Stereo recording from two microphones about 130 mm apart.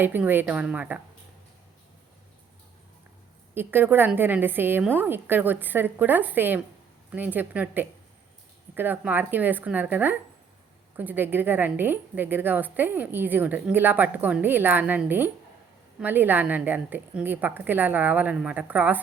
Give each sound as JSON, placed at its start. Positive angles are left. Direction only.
{"t": 0.0, "sound": "a woman's voice", "side_deg": -15}
{"t": 3.5, "sound": "a woman's voice", "side_deg": -15}